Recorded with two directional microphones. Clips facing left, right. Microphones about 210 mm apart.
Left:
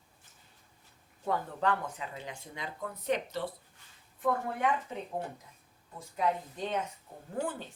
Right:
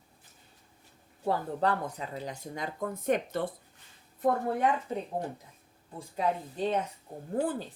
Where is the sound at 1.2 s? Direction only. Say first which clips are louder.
Right 3 dB; 35° right (ahead or behind); by 3.5 s 50° right (ahead or behind).